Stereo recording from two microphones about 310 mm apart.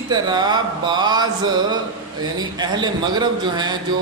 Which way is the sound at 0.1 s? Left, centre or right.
Centre.